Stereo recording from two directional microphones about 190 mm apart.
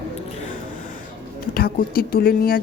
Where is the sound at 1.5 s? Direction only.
50° left (ahead or behind).